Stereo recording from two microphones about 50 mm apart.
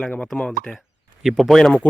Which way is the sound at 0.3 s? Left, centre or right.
Left.